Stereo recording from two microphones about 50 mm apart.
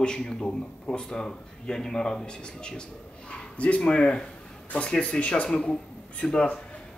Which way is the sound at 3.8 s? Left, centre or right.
Centre.